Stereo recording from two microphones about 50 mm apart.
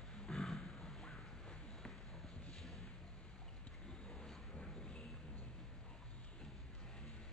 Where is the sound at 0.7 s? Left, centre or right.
Centre.